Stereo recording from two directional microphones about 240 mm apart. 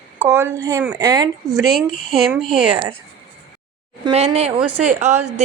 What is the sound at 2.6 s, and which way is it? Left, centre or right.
Speech, right.